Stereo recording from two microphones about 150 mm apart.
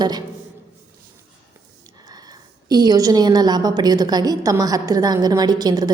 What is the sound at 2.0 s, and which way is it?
A woman's voice, 25° right (ahead or behind).